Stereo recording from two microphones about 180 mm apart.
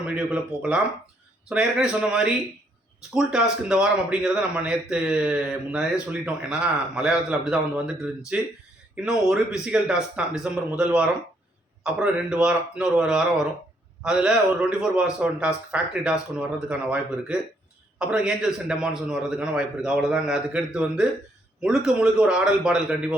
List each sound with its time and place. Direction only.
0.0 s a man's voice: 5° right (ahead or behind)